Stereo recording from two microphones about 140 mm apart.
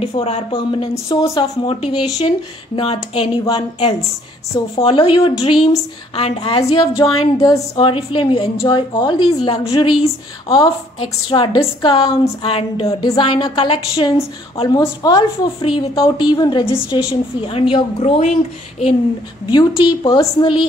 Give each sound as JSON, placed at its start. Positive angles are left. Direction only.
{"t": 0.2, "sound": "a woman's voice", "side_deg": 35}
{"t": 7.4, "sound": "a woman's voice", "side_deg": 30}
{"t": 12.8, "sound": "a woman's voice", "side_deg": 30}
{"t": 17.1, "sound": "a woman's voice", "side_deg": 45}
{"t": 19.5, "sound": "a woman's voice", "side_deg": 35}